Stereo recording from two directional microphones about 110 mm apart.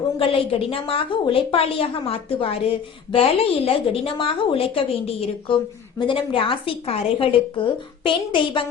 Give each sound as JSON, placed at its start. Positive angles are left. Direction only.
{"t": 0.2, "sound": "a woman's voice", "side_deg": 60}